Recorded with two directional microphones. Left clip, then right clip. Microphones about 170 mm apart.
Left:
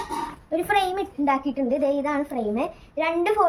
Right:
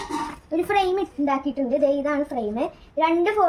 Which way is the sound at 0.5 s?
30° left (ahead or behind).